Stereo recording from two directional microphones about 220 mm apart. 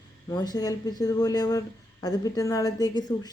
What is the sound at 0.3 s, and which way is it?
Speech, 20° left (ahead or behind).